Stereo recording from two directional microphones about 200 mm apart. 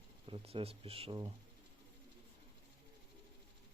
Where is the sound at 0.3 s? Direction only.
30° right (ahead or behind).